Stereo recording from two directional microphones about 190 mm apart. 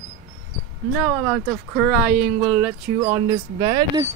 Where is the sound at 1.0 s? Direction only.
Centre (ahead or behind).